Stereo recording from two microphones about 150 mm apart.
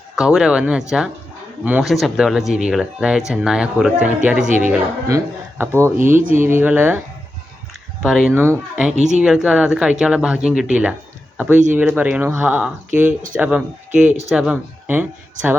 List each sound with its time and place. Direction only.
0.3 s speech: 5° right (ahead or behind)
6.0 s speech: 60° right (ahead or behind)
6.3 s speech: 15° right (ahead or behind)
8.0 s speech: centre (ahead or behind)
8.3 s speech: 15° right (ahead or behind)
9.0 s speech: 50° right (ahead or behind)
9.2 s speech: 5° right (ahead or behind)